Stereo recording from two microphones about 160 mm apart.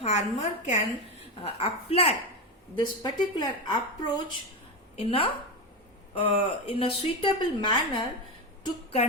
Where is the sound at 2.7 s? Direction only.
30° left (ahead or behind).